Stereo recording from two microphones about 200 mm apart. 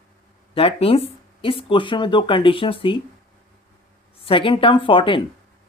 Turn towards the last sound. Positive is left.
turn(degrees=25)  # may be behind; listen again after turning